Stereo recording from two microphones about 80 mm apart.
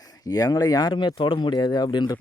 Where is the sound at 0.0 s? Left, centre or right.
Left.